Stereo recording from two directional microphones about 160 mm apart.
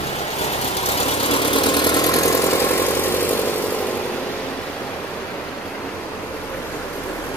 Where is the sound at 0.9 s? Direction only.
35° left (ahead or behind); by 3.3 s 15° left (ahead or behind).